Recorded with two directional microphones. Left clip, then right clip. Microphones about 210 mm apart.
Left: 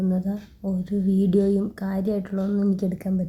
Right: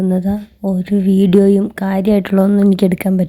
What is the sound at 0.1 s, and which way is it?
Speech, 30° right (ahead or behind).